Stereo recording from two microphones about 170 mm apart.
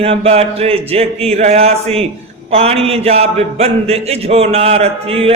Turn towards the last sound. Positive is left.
turn(degrees=-35)  # may be behind; listen again after turning